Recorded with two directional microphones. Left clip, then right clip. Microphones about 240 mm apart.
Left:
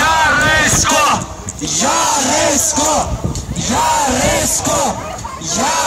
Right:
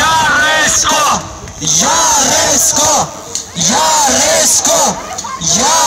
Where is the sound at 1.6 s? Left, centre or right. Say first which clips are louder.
Right 4 dB; right.